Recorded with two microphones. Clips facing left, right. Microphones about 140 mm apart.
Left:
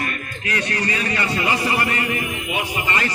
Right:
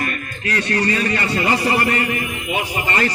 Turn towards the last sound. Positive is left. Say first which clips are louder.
# right 3 dB
turn(degrees=-40)  # may be behind; listen again after turning